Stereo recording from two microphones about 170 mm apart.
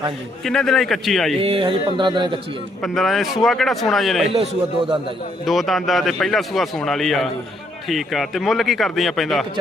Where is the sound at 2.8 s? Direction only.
Centre (ahead or behind).